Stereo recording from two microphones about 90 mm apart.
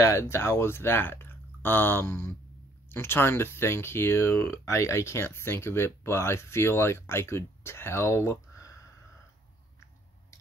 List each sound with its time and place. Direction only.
0.0 s speech: 30° left (ahead or behind)